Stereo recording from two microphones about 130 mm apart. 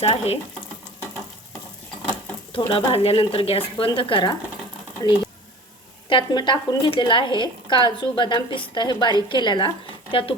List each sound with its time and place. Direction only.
0.0 s speech: 50° left (ahead or behind)
2.5 s a woman's voice: 45° left (ahead or behind)